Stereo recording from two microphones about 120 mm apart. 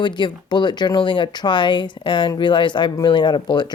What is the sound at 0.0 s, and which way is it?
Speech, 40° left (ahead or behind).